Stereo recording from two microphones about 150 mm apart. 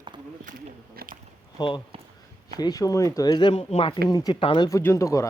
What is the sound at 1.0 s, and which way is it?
Speech, 90° right.